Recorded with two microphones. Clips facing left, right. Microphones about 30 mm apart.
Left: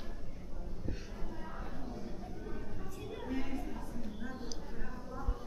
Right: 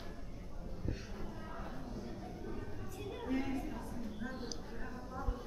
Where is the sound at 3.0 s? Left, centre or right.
Centre.